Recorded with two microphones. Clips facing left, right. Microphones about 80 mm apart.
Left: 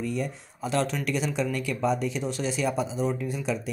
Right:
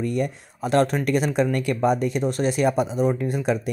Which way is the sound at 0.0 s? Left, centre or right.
Right.